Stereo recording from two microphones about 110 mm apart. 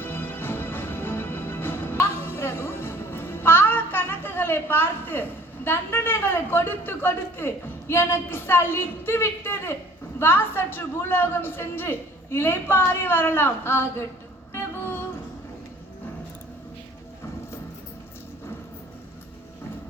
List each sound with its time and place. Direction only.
0.0 s music: 20° left (ahead or behind)
10.2 s a man's voice: 20° left (ahead or behind)
14.5 s music: 20° left (ahead or behind)